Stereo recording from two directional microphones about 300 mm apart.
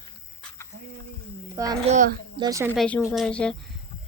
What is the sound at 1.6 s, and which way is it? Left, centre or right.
A child's voice, centre.